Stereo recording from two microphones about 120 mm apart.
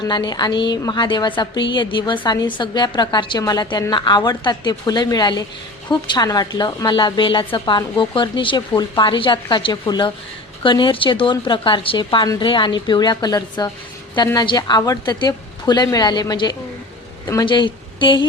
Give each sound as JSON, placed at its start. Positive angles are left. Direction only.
{"t": 0.1, "sound": "a woman's voice", "side_deg": 40}